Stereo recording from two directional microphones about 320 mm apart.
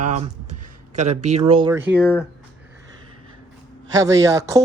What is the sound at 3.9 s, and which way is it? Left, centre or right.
Speech, centre.